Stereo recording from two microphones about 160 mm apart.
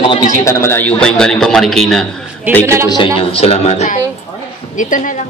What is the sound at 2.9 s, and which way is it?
A man's voice, 35° left (ahead or behind).